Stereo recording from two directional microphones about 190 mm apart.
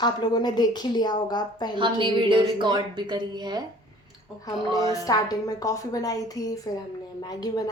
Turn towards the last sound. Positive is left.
turn(degrees=20)  # may be behind; listen again after turning